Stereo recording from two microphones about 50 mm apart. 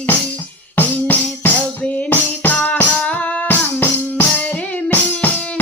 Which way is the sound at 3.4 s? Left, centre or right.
Left.